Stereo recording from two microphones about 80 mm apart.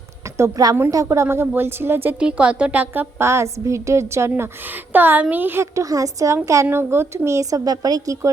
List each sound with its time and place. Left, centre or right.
0.3 s a woman's voice: right
1.0 s a woman's voice: right
2.1 s a woman's voice: centre; by 4.4 s right
4.9 s a woman's voice: right
5.7 s a woman's voice: right
6.7 s a woman's voice: right
7.6 s a woman's voice: right